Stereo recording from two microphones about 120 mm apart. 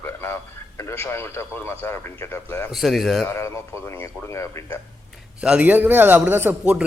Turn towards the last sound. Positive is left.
turn(degrees=-10)  # may be behind; listen again after turning